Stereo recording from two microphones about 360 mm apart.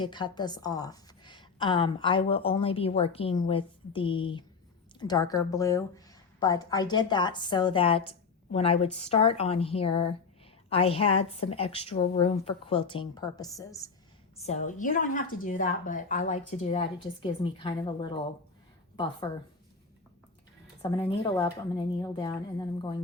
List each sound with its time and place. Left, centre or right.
0.0 s a woman's voice: centre
21.0 s a woman's voice: centre